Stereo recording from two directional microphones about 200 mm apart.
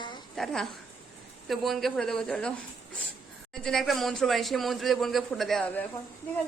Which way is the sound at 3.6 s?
Centre (ahead or behind).